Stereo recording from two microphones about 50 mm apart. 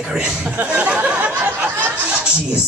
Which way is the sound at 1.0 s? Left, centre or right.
Right.